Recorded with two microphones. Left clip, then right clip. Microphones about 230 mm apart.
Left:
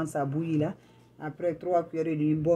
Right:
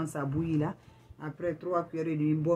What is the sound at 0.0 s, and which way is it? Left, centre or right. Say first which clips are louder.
Speech: left 4 dB; centre.